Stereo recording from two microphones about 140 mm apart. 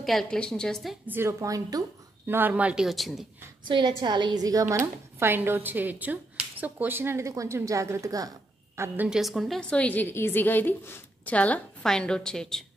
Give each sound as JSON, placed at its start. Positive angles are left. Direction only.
{"t": 0.0, "sound": "speech", "side_deg": 0}
{"t": 1.0, "sound": "a woman's voice", "side_deg": -15}
{"t": 2.2, "sound": "speech", "side_deg": -15}
{"t": 3.6, "sound": "a woman's voice", "side_deg": -35}